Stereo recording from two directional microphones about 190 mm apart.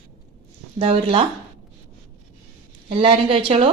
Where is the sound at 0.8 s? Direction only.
25° right (ahead or behind).